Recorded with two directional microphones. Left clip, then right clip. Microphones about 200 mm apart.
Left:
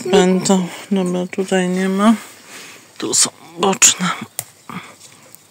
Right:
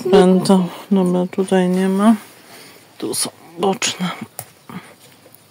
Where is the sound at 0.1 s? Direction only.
15° right (ahead or behind).